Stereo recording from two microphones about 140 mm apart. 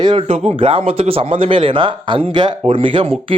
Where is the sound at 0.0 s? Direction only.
40° right (ahead or behind).